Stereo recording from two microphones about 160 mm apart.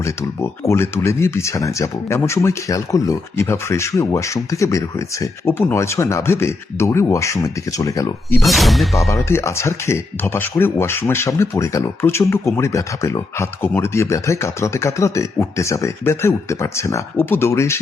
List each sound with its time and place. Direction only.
0.0 s speech: 15° left (ahead or behind)
8.4 s speech: centre (ahead or behind)
9.0 s speech: 20° left (ahead or behind)